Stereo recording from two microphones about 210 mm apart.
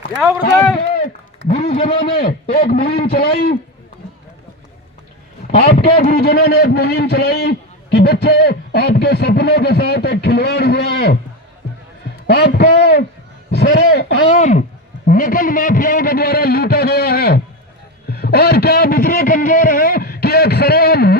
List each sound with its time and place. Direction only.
0.4 s a man's voice: 30° left (ahead or behind)
2.1 s a man's voice: 45° left (ahead or behind)
5.5 s a man's voice: 30° left (ahead or behind)
6.1 s a man's voice: 50° left (ahead or behind)
12.3 s a man's voice: 50° left (ahead or behind)
14.3 s a man's voice: 35° left (ahead or behind)